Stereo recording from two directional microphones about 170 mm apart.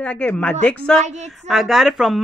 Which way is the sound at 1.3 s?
Centre (ahead or behind).